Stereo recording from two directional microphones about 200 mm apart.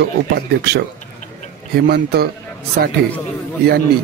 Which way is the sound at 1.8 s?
50° right (ahead or behind).